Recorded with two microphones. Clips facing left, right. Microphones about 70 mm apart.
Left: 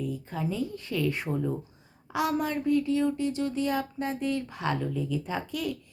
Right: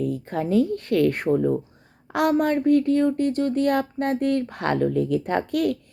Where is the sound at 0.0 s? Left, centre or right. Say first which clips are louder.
Right 7 dB; right.